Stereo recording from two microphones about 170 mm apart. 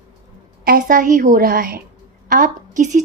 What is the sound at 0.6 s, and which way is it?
A woman's voice, 50° right (ahead or behind).